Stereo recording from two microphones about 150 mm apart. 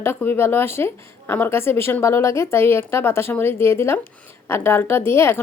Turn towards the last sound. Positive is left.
turn(degrees=15)  # may be behind; listen again after turning